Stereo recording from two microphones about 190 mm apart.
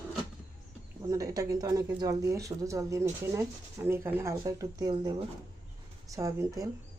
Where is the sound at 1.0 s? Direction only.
15° right (ahead or behind).